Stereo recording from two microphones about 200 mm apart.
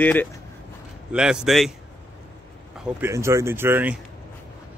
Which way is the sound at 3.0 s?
15° right (ahead or behind).